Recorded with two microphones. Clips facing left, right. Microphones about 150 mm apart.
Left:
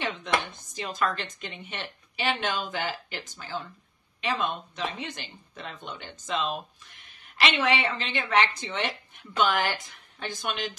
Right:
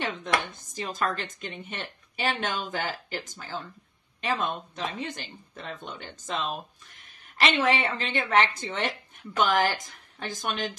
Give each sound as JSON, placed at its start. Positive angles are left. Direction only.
{"t": 0.0, "sound": "chopping", "side_deg": -45}
{"t": 0.7, "sound": "a woman's voice", "side_deg": -45}